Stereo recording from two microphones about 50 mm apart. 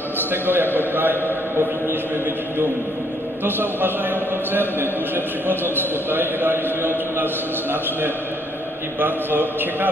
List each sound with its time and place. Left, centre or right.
0.2 s a man's voice: right
3.4 s speech: right
9.0 s speech: right